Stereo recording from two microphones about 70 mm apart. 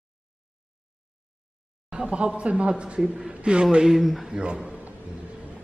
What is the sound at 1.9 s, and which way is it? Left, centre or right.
A man's voice, centre.